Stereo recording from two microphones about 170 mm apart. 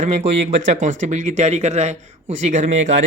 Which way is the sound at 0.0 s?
45° right (ahead or behind).